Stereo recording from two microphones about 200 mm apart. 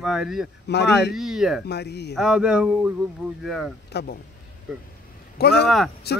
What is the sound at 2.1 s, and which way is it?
Speech, 5° right (ahead or behind).